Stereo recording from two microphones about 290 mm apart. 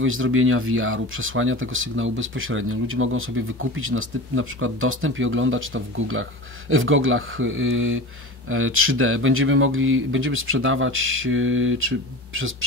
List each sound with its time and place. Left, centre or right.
0.0 s speech: right